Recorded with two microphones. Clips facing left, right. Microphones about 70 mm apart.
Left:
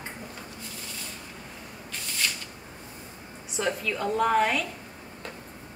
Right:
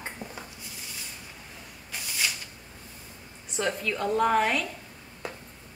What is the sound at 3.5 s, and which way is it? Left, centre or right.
A woman's voice, centre.